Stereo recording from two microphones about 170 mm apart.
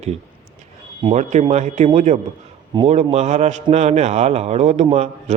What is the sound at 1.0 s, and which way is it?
A man's voice, 40° right (ahead or behind).